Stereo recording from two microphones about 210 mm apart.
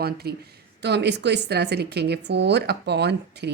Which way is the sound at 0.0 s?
50° right (ahead or behind).